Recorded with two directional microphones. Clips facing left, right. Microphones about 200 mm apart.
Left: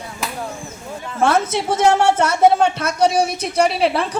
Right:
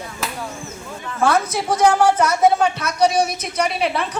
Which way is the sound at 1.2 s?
25° left (ahead or behind).